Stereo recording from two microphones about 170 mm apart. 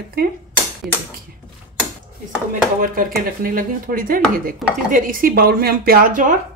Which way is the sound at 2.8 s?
55° right (ahead or behind).